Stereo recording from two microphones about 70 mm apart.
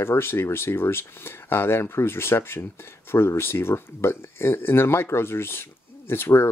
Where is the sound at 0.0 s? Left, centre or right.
Left.